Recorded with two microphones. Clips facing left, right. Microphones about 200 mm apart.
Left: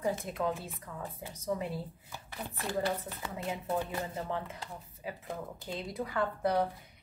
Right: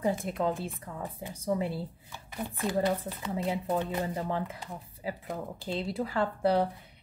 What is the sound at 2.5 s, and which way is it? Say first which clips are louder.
Speech: right 5 dB; 20° right (ahead or behind).